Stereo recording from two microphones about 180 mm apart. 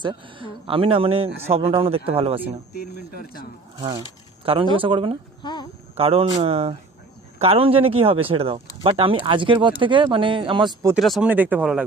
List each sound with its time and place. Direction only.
0.0 s speech: 25° right (ahead or behind)
2.7 s speech: 55° left (ahead or behind)
3.8 s speech: 25° right (ahead or behind)
5.4 s a sound: 25° left (ahead or behind)
6.0 s speech: 30° right (ahead or behind)
10.9 s speech: centre (ahead or behind)